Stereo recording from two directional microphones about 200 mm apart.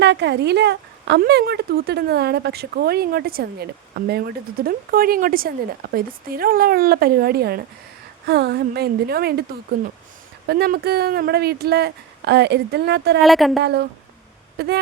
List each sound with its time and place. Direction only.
0.0 s speech: 60° right (ahead or behind)
13.2 s a woman's voice: centre (ahead or behind)
13.6 s speech: 55° right (ahead or behind)